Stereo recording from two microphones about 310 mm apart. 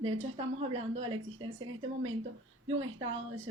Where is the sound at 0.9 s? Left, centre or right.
Right.